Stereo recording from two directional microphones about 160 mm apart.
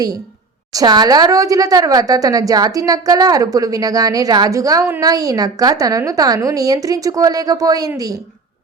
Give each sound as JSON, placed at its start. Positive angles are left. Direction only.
{"t": 0.7, "sound": "a woman's voice", "side_deg": -25}